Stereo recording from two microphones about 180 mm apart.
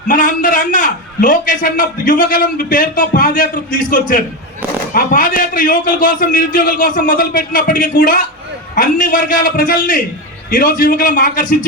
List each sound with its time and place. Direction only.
0.1 s a man's voice: 45° left (ahead or behind)